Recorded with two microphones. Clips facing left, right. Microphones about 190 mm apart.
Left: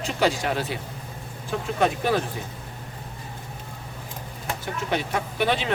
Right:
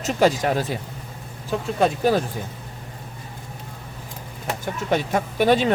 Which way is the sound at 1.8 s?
35° right (ahead or behind).